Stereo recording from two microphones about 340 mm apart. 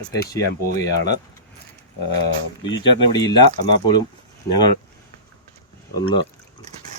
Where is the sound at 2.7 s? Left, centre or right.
Left.